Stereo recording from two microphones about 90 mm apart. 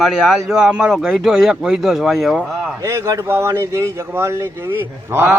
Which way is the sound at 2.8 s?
35° right (ahead or behind).